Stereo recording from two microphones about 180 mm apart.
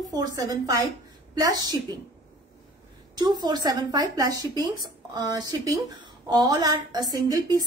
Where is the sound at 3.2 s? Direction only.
25° right (ahead or behind).